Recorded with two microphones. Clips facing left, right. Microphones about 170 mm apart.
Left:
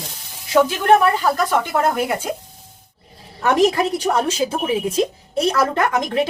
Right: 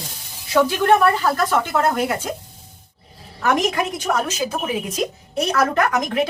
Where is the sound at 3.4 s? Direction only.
35° left (ahead or behind).